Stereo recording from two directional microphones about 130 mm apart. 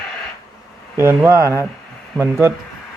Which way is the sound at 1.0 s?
20° right (ahead or behind).